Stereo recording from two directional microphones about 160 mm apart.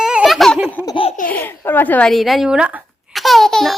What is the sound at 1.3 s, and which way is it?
Speech, 10° left (ahead or behind).